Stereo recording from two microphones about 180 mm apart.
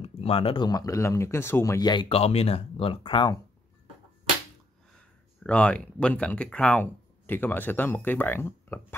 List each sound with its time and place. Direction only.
0.0 s speech: 30° left (ahead or behind)
4.9 s speech: 5° left (ahead or behind)